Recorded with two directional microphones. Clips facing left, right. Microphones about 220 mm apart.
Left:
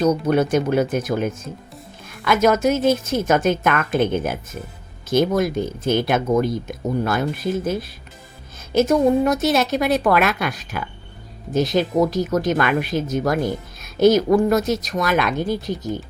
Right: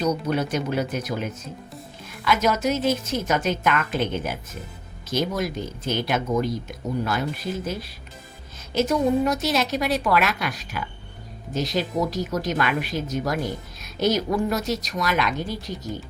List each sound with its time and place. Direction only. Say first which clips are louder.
0.0 s a woman's voice: left 6 dB; 50° left (ahead or behind)